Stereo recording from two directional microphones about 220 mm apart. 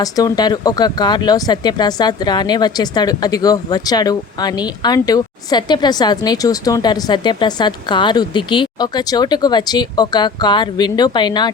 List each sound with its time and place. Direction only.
0.0 s speech: 15° left (ahead or behind)